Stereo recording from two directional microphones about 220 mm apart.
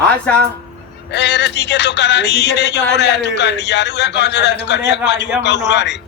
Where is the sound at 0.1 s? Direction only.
5° left (ahead or behind).